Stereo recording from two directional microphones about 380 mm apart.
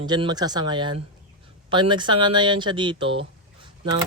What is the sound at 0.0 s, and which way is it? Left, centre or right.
Speech, centre.